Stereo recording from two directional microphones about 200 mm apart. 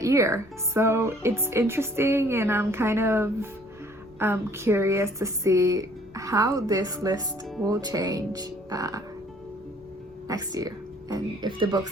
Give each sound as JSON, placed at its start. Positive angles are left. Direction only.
{"t": 0.0, "sound": "speech", "side_deg": -15}
{"t": 10.2, "sound": "speech", "side_deg": -20}